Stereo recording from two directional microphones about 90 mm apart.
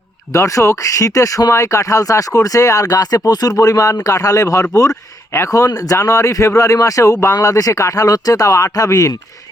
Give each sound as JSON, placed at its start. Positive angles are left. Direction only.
{"t": 0.3, "sound": "a man's voice", "side_deg": 35}